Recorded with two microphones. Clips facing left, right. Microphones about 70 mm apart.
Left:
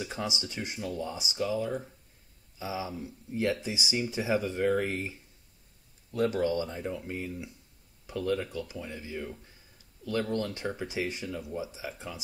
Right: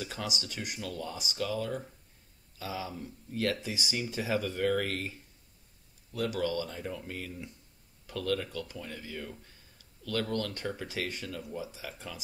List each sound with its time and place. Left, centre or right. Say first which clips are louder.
0.0 s speech: left 2 dB; left
6.1 s speech: left 4 dB; left